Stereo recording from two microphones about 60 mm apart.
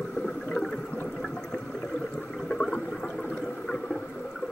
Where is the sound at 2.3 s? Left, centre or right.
Centre.